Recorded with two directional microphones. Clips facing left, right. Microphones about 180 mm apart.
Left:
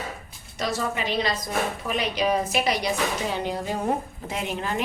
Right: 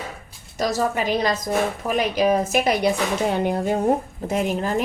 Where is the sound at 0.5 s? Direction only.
40° right (ahead or behind).